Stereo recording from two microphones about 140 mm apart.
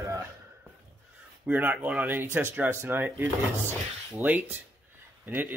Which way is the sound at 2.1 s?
15° right (ahead or behind).